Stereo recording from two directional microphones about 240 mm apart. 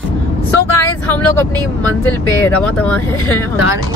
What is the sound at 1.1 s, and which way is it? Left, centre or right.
Speech, centre.